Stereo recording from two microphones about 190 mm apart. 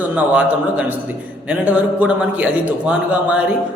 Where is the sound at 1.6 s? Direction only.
10° right (ahead or behind).